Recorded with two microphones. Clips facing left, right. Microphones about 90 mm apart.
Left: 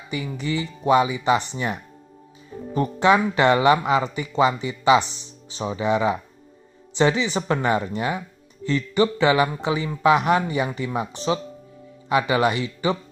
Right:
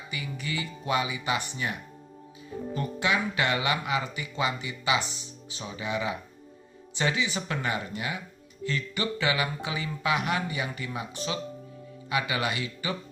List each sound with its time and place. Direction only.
0.2 s speech: 30° left (ahead or behind)
2.7 s speech: 35° left (ahead or behind)
12.1 s speech: 35° left (ahead or behind)